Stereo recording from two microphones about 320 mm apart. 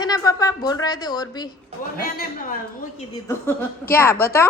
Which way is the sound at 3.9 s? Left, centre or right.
Centre.